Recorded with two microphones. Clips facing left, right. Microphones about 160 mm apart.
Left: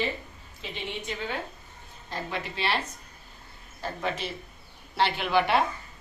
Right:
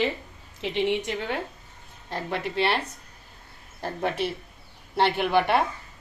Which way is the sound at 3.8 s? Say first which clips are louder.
Right 4 dB; 60° right (ahead or behind).